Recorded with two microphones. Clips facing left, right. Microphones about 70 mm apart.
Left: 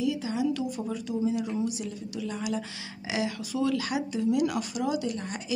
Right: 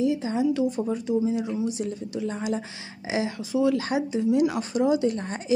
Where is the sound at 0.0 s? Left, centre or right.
Right.